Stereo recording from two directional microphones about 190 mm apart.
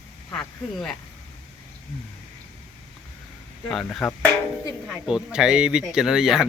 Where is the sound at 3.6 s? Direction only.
5° left (ahead or behind).